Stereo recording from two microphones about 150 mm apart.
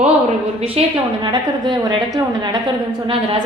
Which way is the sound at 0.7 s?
30° right (ahead or behind).